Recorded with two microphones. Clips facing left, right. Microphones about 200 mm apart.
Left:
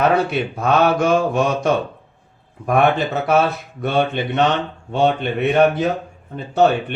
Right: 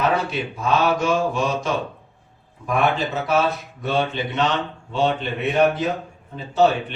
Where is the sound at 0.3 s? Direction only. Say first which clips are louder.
Left 4 dB; 60° left (ahead or behind).